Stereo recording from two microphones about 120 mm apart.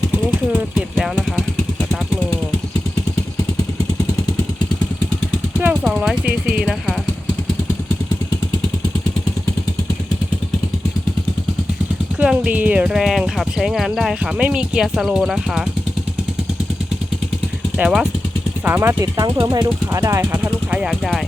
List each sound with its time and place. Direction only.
0.9 s vehicle: centre (ahead or behind)
5.6 s jackhammer: 5° right (ahead or behind)
12.2 s speech: 5° right (ahead or behind)
17.7 s speech: 5° right (ahead or behind)
18.6 s speech: 20° right (ahead or behind)
20.3 s speech: 15° right (ahead or behind)